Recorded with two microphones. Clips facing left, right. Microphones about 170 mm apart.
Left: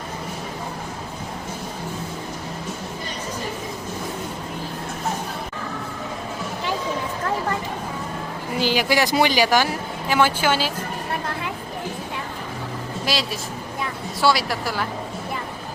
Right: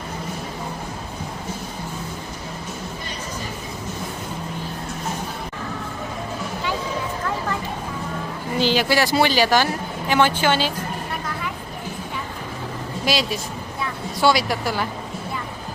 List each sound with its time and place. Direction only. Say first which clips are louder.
8.6 s speech: right 1 dB; 10° left (ahead or behind)
13.1 s speech: right 4 dB; centre (ahead or behind)